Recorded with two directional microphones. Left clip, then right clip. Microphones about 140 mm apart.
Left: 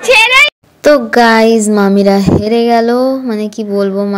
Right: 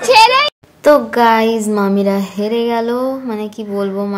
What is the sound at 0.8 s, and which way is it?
A woman's voice, 40° left (ahead or behind).